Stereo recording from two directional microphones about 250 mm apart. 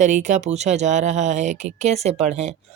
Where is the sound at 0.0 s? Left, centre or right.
Right.